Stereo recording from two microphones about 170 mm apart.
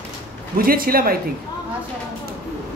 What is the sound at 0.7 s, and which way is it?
Speech, 60° right (ahead or behind).